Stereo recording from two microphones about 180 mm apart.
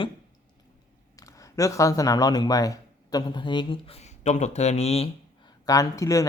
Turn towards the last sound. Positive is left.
turn(degrees=15)  # may be behind; listen again after turning